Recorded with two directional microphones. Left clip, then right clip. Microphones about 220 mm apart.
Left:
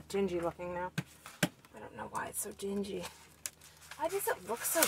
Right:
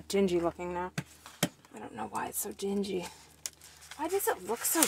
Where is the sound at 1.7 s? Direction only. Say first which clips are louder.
Right 3 dB; 55° right (ahead or behind).